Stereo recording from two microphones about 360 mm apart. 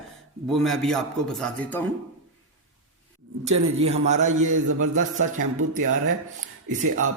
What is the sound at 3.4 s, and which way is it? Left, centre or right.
Speech, centre.